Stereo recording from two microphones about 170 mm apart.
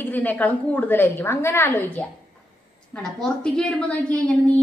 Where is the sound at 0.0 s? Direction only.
10° left (ahead or behind).